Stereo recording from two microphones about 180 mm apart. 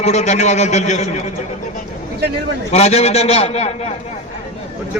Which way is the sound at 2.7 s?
35° left (ahead or behind).